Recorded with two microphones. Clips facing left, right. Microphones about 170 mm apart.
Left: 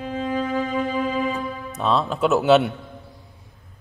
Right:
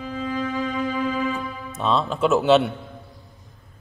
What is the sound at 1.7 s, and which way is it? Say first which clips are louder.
Speech: even; centre (ahead or behind).